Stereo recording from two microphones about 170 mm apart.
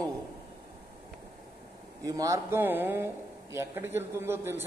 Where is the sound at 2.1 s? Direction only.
20° right (ahead or behind).